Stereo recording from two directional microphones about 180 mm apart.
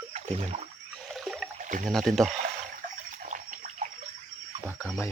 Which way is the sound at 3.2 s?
45° right (ahead or behind).